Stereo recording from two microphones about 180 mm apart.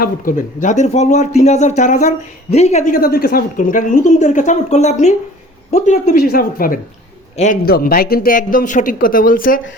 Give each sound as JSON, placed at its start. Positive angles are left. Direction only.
{"t": 0.0, "sound": "speech", "side_deg": 45}